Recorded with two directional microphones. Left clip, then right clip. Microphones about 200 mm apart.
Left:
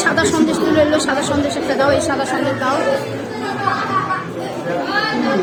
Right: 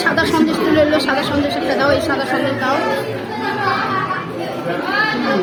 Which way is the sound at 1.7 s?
Centre (ahead or behind).